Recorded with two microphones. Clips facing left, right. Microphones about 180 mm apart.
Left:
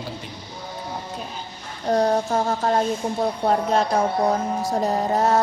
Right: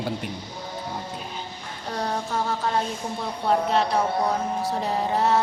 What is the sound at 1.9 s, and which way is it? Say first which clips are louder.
A woman's voice: left 9 dB; 45° left (ahead or behind).